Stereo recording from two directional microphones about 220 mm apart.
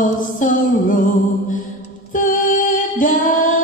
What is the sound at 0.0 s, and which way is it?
Music, 35° left (ahead or behind).